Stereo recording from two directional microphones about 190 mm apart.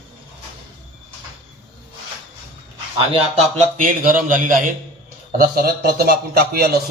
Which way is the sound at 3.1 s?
30° right (ahead or behind).